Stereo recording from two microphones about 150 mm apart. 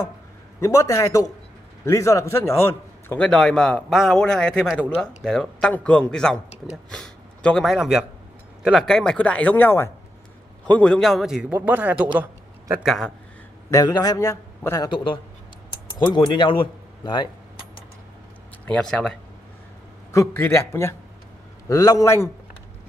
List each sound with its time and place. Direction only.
0.6 s a man's voice: 20° left (ahead or behind); by 12.1 s 10° right (ahead or behind)
12.8 s a man's voice: centre (ahead or behind)
13.7 s a man's voice: 25° left (ahead or behind)
16.1 s speech: 30° left (ahead or behind)
18.7 s a man's voice: 5° left (ahead or behind)
20.1 s a man's voice: 20° left (ahead or behind)